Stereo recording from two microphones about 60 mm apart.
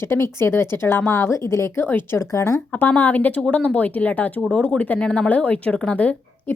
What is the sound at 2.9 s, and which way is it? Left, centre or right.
Speech, left.